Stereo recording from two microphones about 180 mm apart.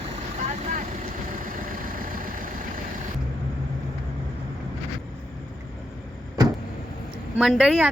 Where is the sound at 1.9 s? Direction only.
50° right (ahead or behind).